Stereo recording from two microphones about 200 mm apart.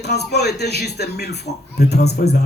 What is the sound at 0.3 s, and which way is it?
Speech, 55° left (ahead or behind).